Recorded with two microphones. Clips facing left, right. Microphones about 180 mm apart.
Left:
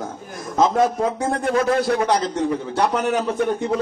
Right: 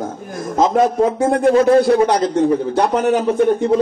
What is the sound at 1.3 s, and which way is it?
A man's voice, 30° right (ahead or behind).